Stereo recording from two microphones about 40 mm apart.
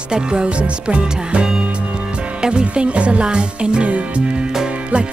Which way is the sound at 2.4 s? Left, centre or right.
Right.